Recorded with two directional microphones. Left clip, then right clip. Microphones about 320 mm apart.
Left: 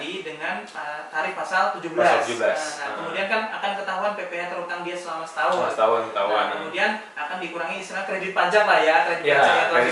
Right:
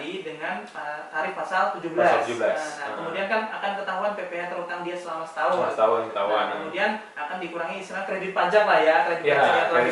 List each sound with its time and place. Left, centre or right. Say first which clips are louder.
1.2 s a man's voice: left 2 dB; centre
5.5 s a man's voice: left 1 dB; centre
6.1 s a man's voice: left 2 dB; centre
7.9 s a man's voice: left 2 dB; centre